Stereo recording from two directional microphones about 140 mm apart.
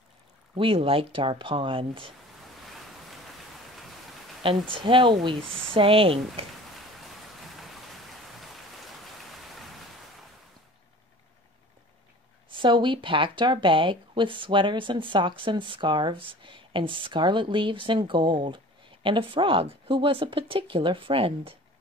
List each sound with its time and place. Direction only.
0.6 s speech: 40° right (ahead or behind)
4.4 s speech: 40° right (ahead or behind)
7.5 s rain: centre (ahead or behind)
12.5 s speech: 35° right (ahead or behind)